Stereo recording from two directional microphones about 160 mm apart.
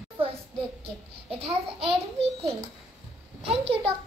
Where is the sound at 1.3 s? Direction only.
35° right (ahead or behind).